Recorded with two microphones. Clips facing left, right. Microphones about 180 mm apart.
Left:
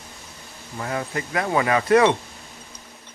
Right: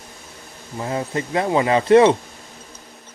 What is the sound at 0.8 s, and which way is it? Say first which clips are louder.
Speech: right 3 dB; 25° right (ahead or behind).